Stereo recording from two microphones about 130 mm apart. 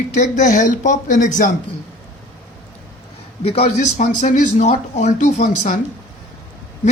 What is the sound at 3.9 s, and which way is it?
Speech, 80° left.